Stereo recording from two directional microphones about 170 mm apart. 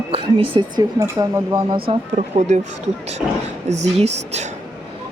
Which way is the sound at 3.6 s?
40° right (ahead or behind).